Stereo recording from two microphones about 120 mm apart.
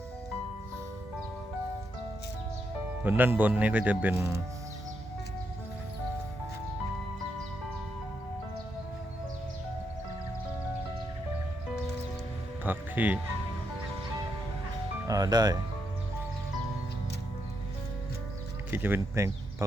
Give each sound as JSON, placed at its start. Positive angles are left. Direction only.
{"t": 3.0, "sound": "speech", "side_deg": -15}
{"t": 12.6, "sound": "music", "side_deg": -15}
{"t": 15.0, "sound": "speech", "side_deg": -30}
{"t": 18.7, "sound": "speech", "side_deg": -20}